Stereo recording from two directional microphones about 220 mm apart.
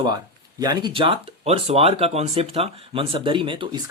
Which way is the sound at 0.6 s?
20° right (ahead or behind).